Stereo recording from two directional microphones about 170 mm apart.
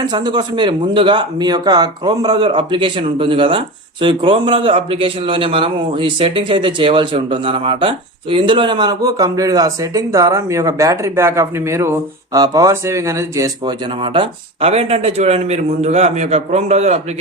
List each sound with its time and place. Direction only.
0.0 s a man's voice: 25° right (ahead or behind); by 17.0 s 40° right (ahead or behind)